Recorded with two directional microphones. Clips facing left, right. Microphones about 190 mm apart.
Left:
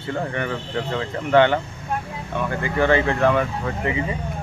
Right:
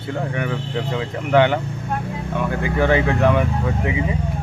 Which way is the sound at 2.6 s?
10° right (ahead or behind).